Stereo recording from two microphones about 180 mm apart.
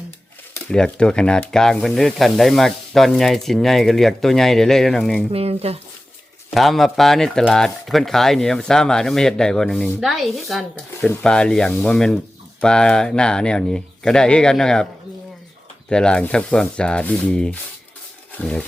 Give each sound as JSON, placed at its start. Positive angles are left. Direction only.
{"t": 0.7, "sound": "speech", "side_deg": 5}
{"t": 5.3, "sound": "speech", "side_deg": -35}
{"t": 6.5, "sound": "speech", "side_deg": 0}
{"t": 15.9, "sound": "speech", "side_deg": 5}